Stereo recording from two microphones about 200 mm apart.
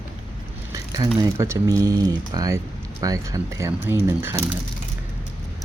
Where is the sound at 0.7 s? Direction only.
20° right (ahead or behind).